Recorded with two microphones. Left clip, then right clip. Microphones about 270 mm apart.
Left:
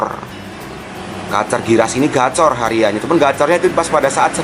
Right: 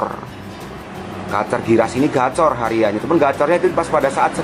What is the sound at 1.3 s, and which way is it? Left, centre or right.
A man's voice, centre.